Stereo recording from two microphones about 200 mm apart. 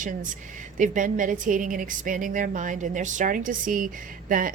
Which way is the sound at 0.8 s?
40° right (ahead or behind).